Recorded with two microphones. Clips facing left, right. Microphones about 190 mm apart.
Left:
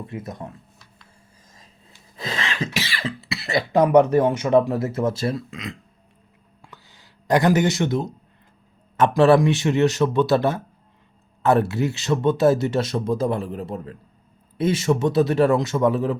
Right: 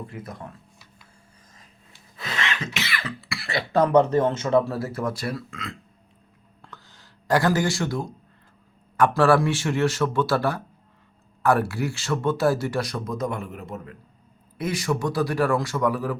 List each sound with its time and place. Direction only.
0.1 s speech: 20° left (ahead or behind)
2.1 s a sound: 30° left (ahead or behind)
2.7 s cough: 30° left (ahead or behind)
3.7 s speech: 15° left (ahead or behind)
6.6 s a sound: 10° left (ahead or behind)
9.0 s speech: 20° left (ahead or behind)